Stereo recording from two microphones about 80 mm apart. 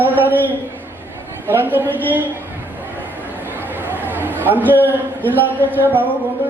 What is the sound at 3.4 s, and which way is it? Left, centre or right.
Chatter, right.